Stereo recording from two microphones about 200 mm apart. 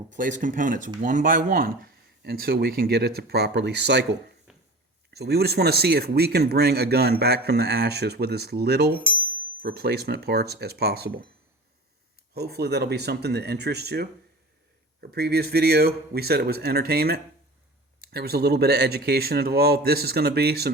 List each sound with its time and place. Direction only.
0.1 s speech: 40° right (ahead or behind); by 4.2 s 60° right (ahead or behind)
4.5 s a sound: centre (ahead or behind)
5.1 s speech: 55° right (ahead or behind)
12.3 s speech: 55° right (ahead or behind)
15.1 s speech: 55° right (ahead or behind)